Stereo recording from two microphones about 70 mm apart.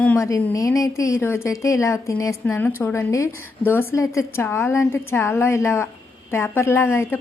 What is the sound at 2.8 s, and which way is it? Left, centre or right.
Speech, left.